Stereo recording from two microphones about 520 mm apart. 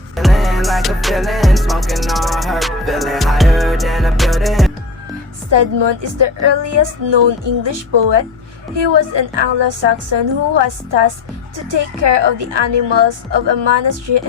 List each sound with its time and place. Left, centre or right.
0.2 s music: centre
5.5 s a woman's voice: right